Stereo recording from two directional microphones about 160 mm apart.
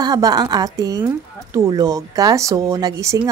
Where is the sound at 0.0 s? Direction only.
25° right (ahead or behind).